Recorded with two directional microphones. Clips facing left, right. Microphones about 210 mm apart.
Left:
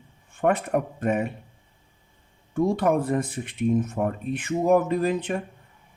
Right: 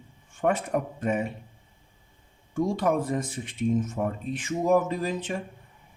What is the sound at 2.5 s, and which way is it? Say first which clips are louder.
Speech: left 3 dB; 60° left (ahead or behind).